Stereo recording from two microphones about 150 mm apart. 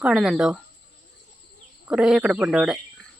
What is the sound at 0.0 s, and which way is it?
Speech, centre (ahead or behind).